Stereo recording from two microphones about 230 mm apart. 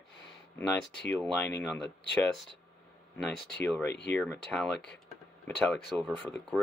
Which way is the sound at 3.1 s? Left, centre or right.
Centre.